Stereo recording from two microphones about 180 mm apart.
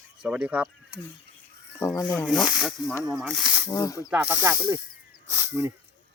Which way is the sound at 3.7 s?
20° left (ahead or behind).